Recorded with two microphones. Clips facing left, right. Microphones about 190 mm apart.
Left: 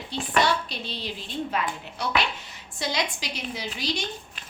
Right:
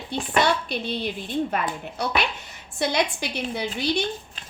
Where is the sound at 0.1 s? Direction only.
55° right (ahead or behind).